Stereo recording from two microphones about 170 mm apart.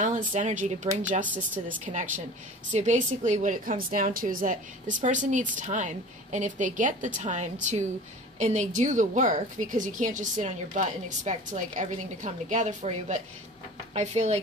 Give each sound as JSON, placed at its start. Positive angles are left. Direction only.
{"t": 0.0, "sound": "a woman's voice", "side_deg": -45}